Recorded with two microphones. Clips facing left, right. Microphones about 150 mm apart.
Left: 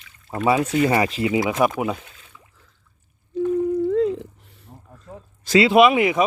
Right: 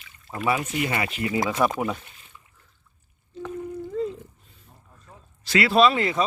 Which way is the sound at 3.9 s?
80° left.